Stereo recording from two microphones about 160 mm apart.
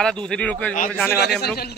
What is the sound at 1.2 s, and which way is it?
Speech, 90° left.